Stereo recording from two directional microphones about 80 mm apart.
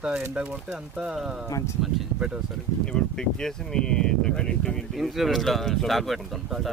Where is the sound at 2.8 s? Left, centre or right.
Centre.